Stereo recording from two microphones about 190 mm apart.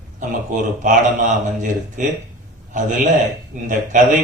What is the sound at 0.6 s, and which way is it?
A man's voice, 40° right (ahead or behind).